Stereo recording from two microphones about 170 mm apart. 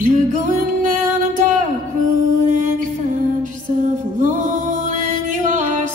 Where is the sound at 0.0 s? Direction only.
55° right (ahead or behind).